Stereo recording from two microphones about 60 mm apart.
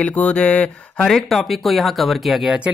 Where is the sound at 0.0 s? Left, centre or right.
Left.